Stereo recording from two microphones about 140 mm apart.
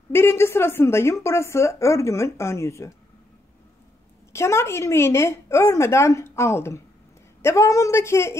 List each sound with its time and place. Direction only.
0.1 s a woman's voice: 15° left (ahead or behind)
4.3 s a woman's voice: 20° left (ahead or behind)